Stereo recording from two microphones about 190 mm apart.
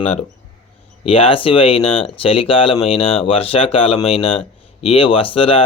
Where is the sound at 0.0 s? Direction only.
35° left (ahead or behind).